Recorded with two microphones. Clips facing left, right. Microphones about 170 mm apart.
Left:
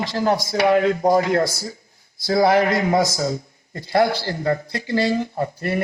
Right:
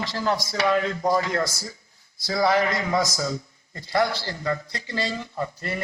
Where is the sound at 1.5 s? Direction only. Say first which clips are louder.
Left 6 dB; 25° left (ahead or behind).